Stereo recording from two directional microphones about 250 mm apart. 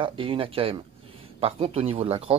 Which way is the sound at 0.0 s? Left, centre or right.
Right.